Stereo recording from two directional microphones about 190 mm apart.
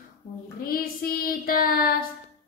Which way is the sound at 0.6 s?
50° left (ahead or behind).